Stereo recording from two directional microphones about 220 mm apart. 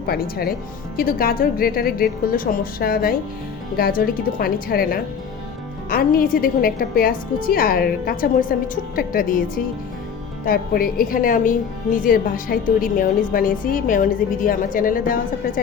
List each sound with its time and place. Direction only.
0.0 s a woman's voice: 45° left (ahead or behind)
10.4 s a woman's voice: 40° left (ahead or behind)